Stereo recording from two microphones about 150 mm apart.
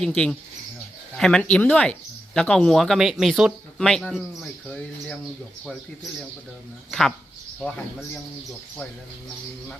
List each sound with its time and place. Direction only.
0.0 s speech: 5° left (ahead or behind)